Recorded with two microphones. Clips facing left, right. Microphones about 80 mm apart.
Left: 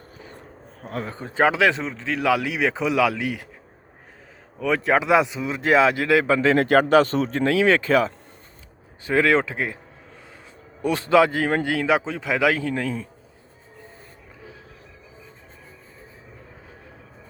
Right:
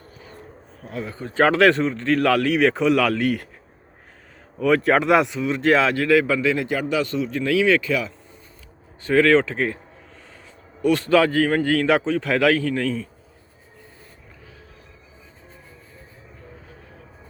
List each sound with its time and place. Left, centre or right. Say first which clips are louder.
0.8 s a man's voice: left 1 dB; left
1.1 s a man's voice: right 2 dB; left
1.5 s speech: right 4 dB; centre
4.6 s a man's voice: right 3 dB; centre; by 6.6 s left
6.6 s speech: left 7 dB; left
9.0 s speech: right 3 dB; centre
10.8 s a man's voice: even; left